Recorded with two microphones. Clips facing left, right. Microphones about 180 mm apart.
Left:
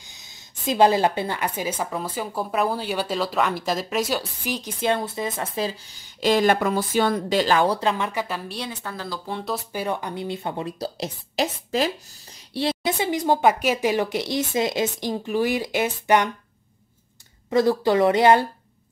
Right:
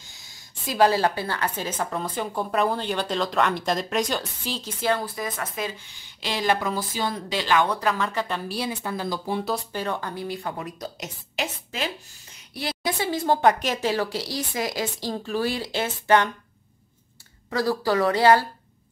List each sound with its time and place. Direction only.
0.0 s a woman's voice: 20° left (ahead or behind)
8.1 s a woman's voice: 10° left (ahead or behind)
8.4 s speech: 5° right (ahead or behind)
9.7 s a woman's voice: 10° left (ahead or behind)
17.5 s a woman's voice: 20° left (ahead or behind)